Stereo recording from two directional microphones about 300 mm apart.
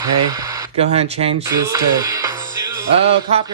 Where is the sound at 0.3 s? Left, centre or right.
Centre.